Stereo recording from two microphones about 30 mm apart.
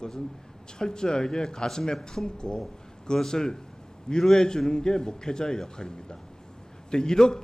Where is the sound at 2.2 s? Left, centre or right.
Left.